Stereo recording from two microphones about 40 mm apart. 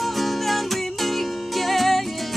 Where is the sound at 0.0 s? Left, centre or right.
Centre.